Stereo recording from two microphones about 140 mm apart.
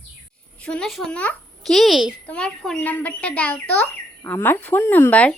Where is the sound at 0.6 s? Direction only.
5° left (ahead or behind).